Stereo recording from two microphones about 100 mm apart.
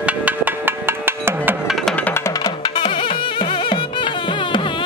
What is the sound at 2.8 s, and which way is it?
Music, 60° left (ahead or behind).